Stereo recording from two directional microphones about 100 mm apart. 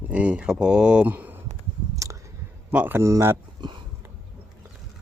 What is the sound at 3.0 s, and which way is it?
Speech, 30° right (ahead or behind).